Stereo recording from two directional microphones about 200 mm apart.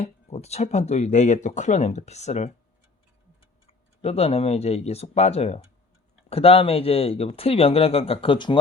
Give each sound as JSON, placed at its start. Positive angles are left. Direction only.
{"t": 0.0, "sound": "speech", "side_deg": 35}
{"t": 3.7, "sound": "speech", "side_deg": 30}